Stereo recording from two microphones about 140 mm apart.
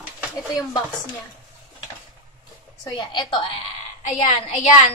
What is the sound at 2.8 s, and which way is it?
Speech, 30° left (ahead or behind).